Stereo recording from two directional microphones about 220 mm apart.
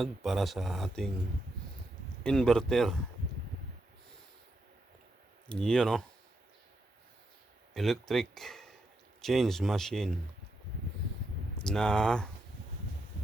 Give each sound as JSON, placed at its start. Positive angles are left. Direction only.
{"t": 0.0, "sound": "speech", "side_deg": 0}
{"t": 2.2, "sound": "speech", "side_deg": 5}
{"t": 5.5, "sound": "speech", "side_deg": 5}
{"t": 7.7, "sound": "speech", "side_deg": 0}
{"t": 11.7, "sound": "speech", "side_deg": 5}